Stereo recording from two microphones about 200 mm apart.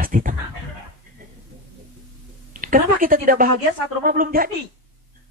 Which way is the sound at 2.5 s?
40° right (ahead or behind).